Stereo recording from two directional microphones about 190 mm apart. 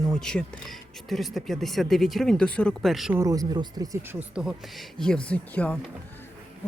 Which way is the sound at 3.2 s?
20° right (ahead or behind).